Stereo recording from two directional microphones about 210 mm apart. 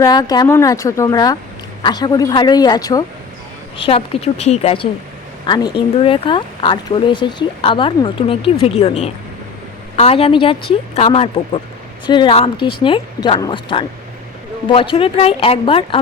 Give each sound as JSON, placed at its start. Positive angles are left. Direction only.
{"t": 0.0, "sound": "speech", "side_deg": 15}